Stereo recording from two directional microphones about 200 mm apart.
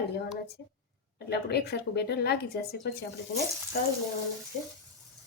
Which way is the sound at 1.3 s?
55° left (ahead or behind).